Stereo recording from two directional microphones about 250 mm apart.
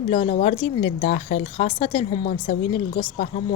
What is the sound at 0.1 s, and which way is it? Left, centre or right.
Speech, left.